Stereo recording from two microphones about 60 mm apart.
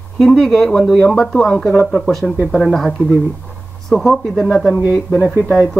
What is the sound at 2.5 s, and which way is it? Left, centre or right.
Speech, centre.